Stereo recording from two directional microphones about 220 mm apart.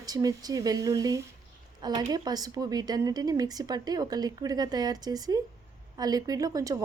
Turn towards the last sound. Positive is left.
turn(degrees=-15)  # may be behind; listen again after turning